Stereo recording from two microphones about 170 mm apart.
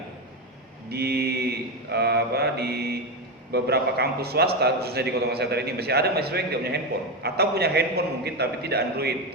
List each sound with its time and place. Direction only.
0.9 s mantra: 70° right (ahead or behind)
3.5 s a man's voice: 70° right (ahead or behind)